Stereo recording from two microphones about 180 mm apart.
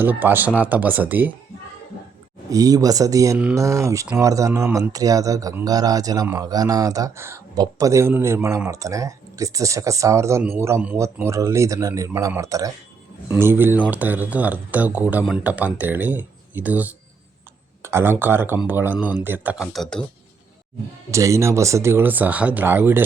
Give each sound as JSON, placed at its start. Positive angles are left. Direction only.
{"t": 0.0, "sound": "speech", "side_deg": -10}
{"t": 2.5, "sound": "speech", "side_deg": -20}
{"t": 19.7, "sound": "speech", "side_deg": 5}
{"t": 21.1, "sound": "speech", "side_deg": -15}